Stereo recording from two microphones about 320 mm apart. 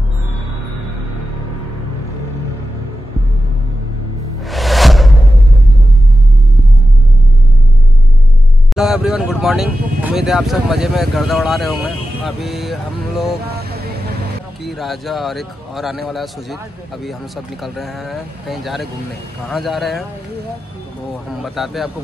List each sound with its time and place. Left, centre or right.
4.5 s music: centre
8.7 s speech: centre
13.5 s vehicle: right
14.6 s speech: centre
17.7 s speech: centre
21.3 s speech: centre